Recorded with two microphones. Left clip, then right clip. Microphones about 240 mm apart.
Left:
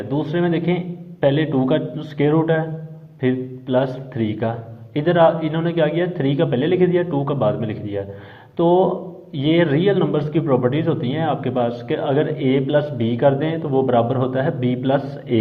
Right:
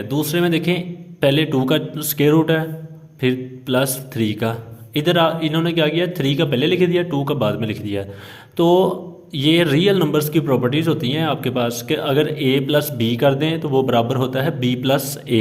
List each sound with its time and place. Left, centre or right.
0.1 s a man's voice: right